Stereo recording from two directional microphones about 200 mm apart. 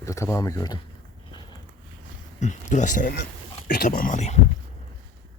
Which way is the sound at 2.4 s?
35° left (ahead or behind).